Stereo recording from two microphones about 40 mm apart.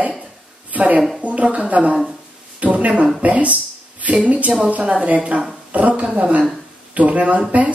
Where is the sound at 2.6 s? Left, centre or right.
Right.